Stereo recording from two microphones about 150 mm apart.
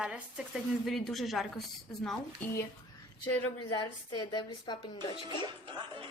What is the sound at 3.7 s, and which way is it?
A woman's voice, 25° left (ahead or behind).